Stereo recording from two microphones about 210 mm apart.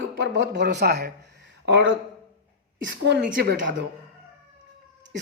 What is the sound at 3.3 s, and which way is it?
Speech, 55° right (ahead or behind).